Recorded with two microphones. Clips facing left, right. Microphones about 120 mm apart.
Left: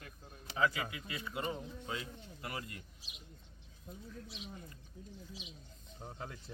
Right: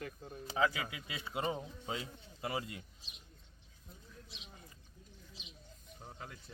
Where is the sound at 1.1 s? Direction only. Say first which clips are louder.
Right 3 dB; 25° right (ahead or behind).